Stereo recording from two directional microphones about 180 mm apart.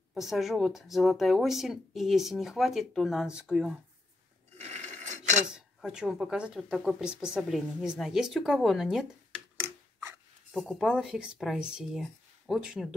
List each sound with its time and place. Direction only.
0.1 s speech: centre (ahead or behind)
4.6 s a sound: 40° right (ahead or behind)
5.5 s speech: 5° right (ahead or behind)
10.6 s speech: centre (ahead or behind)